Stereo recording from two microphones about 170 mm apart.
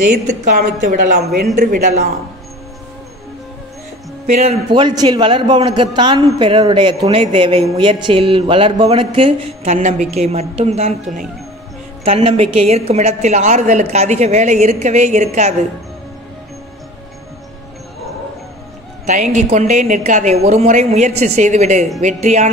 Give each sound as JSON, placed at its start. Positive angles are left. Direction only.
{"t": 0.0, "sound": "a woman's voice", "side_deg": -50}
{"t": 4.4, "sound": "a man's voice", "side_deg": -35}
{"t": 9.8, "sound": "a woman's voice", "side_deg": -45}
{"t": 12.0, "sound": "a woman's voice", "side_deg": -35}
{"t": 19.3, "sound": "a woman's voice", "side_deg": -45}